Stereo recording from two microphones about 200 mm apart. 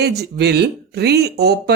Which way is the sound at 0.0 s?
55° right (ahead or behind).